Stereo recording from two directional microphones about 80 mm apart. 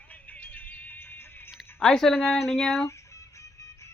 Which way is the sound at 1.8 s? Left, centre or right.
Centre.